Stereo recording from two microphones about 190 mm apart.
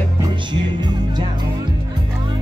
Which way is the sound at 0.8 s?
20° right (ahead or behind).